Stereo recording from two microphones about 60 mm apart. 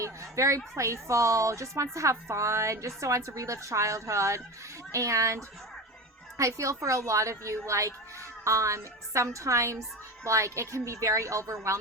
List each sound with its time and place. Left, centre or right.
0.0 s a woman's voice: right